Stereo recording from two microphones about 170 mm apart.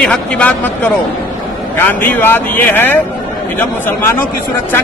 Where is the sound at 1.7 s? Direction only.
10° left (ahead or behind).